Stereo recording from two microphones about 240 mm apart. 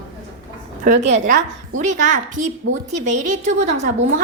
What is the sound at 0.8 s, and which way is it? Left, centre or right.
A woman's voice, right.